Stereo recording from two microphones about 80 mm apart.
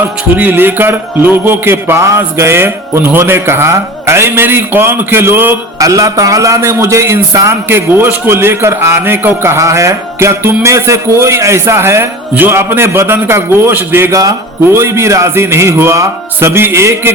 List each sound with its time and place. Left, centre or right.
0.3 s a man's voice: right
5.8 s a man's voice: right
14.1 s speech: right
14.7 s a man's voice: right